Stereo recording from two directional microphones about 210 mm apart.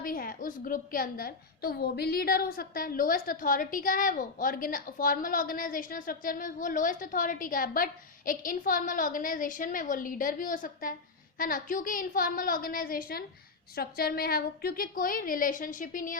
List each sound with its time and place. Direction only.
0.0 s a woman's voice: 45° left (ahead or behind)